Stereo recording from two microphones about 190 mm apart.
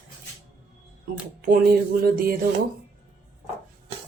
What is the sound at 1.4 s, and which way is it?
Speech, 50° right (ahead or behind).